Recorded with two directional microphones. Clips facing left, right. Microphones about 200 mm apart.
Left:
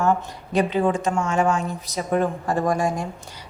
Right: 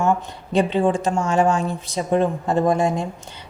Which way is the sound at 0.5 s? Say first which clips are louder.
Right 2 dB; 30° right (ahead or behind).